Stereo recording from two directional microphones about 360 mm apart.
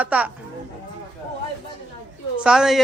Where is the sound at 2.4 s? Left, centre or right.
Centre.